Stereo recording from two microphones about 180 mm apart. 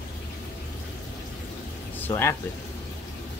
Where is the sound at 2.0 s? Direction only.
15° left (ahead or behind).